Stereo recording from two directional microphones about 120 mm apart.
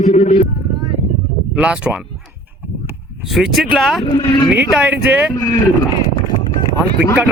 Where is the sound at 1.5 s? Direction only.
10° right (ahead or behind).